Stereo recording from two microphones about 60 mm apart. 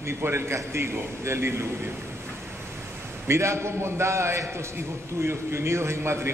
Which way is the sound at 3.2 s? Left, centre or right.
Right.